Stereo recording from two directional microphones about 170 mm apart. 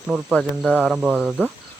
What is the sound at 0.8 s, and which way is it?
Cricket, 10° right (ahead or behind).